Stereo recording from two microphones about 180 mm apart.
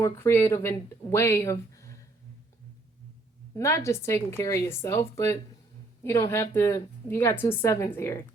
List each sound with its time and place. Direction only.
0.0 s speech: 15° left (ahead or behind)
3.5 s speech: 15° left (ahead or behind)